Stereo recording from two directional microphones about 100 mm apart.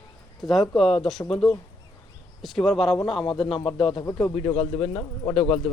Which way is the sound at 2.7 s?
Centre (ahead or behind).